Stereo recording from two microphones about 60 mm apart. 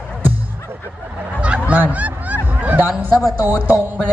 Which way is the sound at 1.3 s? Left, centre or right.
Centre.